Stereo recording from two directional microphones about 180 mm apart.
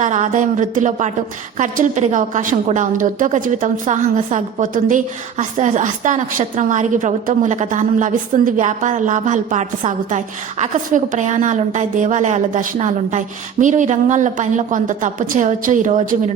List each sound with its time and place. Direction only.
0.0 s a woman's voice: 45° right (ahead or behind)